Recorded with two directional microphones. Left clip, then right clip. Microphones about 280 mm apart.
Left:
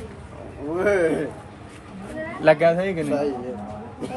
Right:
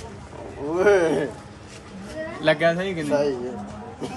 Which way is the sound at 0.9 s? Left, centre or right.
Centre.